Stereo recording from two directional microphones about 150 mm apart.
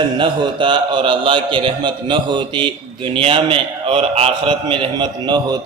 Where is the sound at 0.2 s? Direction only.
35° right (ahead or behind).